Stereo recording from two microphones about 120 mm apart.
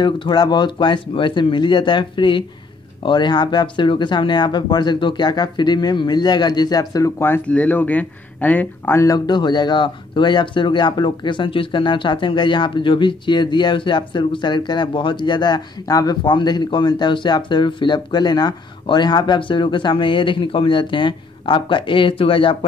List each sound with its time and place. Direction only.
0.0 s speech: 40° left (ahead or behind)